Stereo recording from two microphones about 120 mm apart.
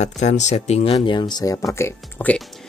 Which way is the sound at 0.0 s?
80° left.